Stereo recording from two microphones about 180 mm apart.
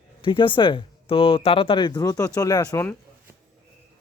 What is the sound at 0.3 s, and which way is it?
Speech, 25° left (ahead or behind).